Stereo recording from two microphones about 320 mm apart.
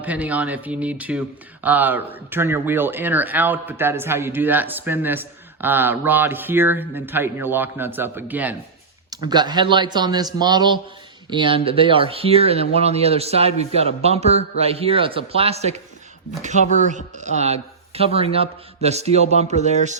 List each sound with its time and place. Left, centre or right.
0.0 s a man's voice: centre; by 20.0 s right